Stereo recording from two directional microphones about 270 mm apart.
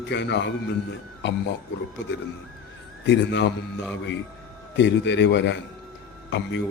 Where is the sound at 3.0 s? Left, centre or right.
Left.